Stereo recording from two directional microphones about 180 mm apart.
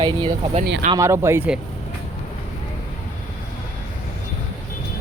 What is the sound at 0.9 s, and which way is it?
Speech, 15° right (ahead or behind).